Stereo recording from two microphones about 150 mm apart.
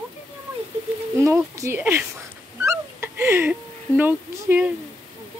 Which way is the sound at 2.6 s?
15° right (ahead or behind).